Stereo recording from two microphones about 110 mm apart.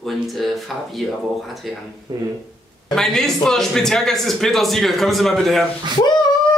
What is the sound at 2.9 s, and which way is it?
A man's voice, 5° left (ahead or behind).